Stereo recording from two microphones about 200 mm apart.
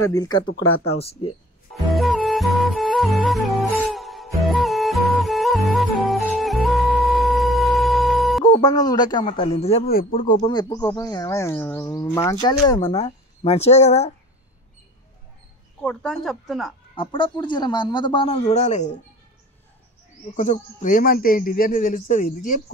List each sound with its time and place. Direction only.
0.0 s speech: 20° left (ahead or behind)
1.7 s music: centre (ahead or behind)
8.5 s speech: 20° left (ahead or behind)
9.2 s speech: 30° left (ahead or behind)
9.8 s speech: 45° left (ahead or behind)
10.4 s speech: 20° left (ahead or behind)
12.9 s speech: 30° left (ahead or behind)
15.8 s speech: 5° left (ahead or behind)
16.9 s speech: 25° left (ahead or behind)
20.3 s speech: 40° left (ahead or behind)